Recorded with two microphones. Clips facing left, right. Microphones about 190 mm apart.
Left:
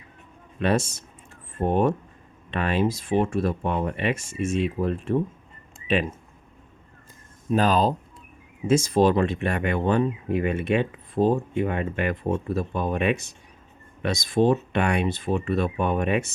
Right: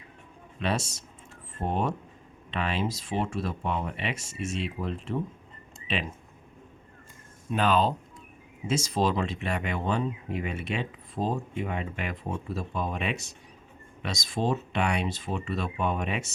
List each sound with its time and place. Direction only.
0.6 s speech: 50° left (ahead or behind)
7.5 s speech: 40° left (ahead or behind)
8.6 s speech: 50° left (ahead or behind)